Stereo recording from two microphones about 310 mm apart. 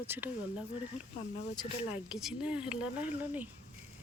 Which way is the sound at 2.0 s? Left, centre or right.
Centre.